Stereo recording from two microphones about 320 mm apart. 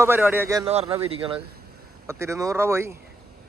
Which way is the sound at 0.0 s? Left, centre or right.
Centre.